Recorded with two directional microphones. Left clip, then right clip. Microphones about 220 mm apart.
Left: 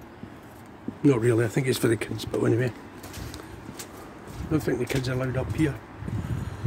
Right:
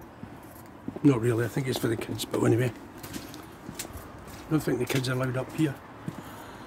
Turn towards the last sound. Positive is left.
turn(degrees=5)  # may be behind; listen again after turning